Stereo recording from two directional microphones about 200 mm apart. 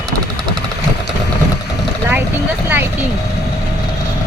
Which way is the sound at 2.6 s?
10° right (ahead or behind).